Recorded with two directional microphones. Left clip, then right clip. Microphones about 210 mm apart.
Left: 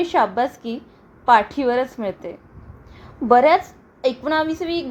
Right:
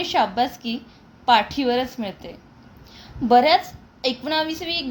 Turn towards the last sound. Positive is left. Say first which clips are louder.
# left 2 dB
turn(degrees=20)  # may be behind; listen again after turning